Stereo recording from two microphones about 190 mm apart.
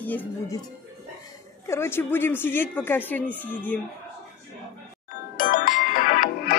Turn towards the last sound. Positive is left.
turn(degrees=45)  # may be behind; listen again after turning